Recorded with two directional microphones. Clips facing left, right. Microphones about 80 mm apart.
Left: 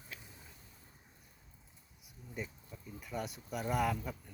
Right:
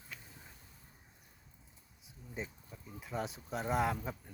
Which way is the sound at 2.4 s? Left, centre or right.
Right.